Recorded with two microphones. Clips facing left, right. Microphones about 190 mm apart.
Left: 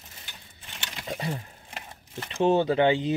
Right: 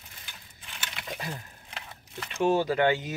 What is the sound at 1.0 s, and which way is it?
Speech, 30° left (ahead or behind).